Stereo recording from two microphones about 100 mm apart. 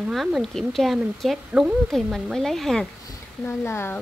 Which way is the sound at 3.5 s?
25° left (ahead or behind).